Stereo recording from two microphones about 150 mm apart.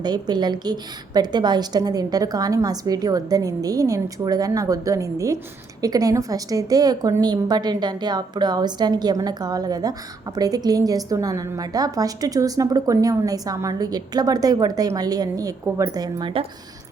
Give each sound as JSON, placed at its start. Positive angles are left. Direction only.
{"t": 0.0, "sound": "a woman's voice", "side_deg": -30}